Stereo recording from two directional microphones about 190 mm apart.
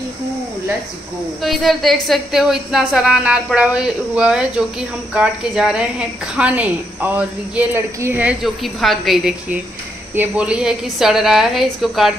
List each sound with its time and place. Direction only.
1.4 s a woman's voice: centre (ahead or behind)